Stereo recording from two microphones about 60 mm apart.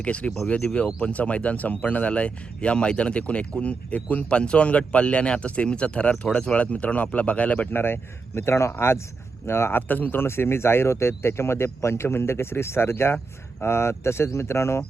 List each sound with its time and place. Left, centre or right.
0.0 s speech: centre
7.7 s speech: left
9.9 s speech: left